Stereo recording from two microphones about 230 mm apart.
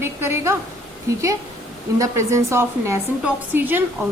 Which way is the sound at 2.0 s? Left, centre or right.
Centre.